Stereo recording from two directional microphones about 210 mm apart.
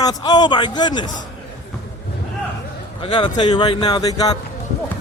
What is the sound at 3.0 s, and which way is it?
Speech, 25° left (ahead or behind).